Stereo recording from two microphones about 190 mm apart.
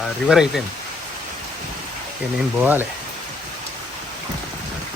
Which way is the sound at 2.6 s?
10° right (ahead or behind).